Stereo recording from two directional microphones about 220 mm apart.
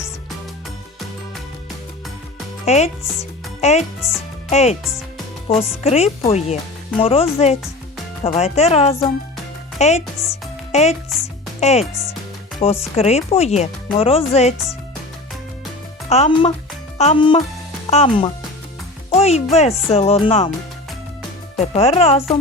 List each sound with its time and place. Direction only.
2.6 s speech: 30° left (ahead or behind)
16.0 s speech: 30° left (ahead or behind)
21.6 s speech: 30° left (ahead or behind)